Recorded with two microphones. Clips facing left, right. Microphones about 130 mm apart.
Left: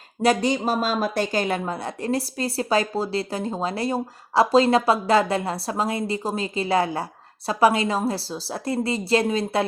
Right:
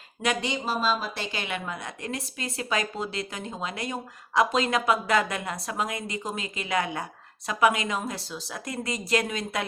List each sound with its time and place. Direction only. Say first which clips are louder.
0.2 s speech: left 8 dB; 40° left (ahead or behind)